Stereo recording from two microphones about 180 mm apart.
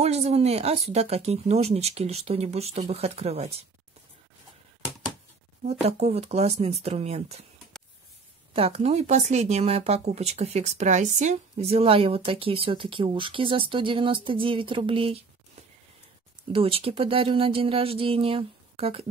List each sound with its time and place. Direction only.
0.0 s speech: 35° right (ahead or behind)
5.7 s speech: 35° right (ahead or behind)
8.5 s speech: 35° right (ahead or behind)
16.5 s speech: 30° right (ahead or behind)